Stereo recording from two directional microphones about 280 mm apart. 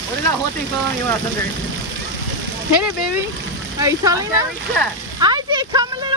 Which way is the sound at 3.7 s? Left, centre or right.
Centre.